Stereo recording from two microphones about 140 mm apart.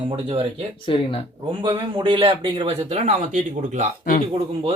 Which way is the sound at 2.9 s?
55° right (ahead or behind).